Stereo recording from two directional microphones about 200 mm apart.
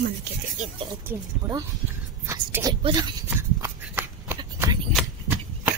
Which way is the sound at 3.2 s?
10° right (ahead or behind).